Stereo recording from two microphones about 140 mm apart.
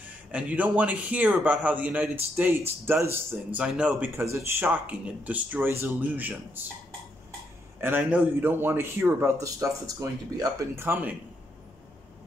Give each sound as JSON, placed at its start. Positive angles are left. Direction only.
{"t": 0.0, "sound": "speech", "side_deg": -10}
{"t": 7.8, "sound": "speech", "side_deg": -10}
{"t": 10.9, "sound": "speech", "side_deg": -15}